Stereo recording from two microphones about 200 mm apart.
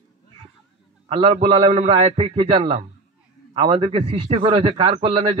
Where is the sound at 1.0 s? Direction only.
30° right (ahead or behind).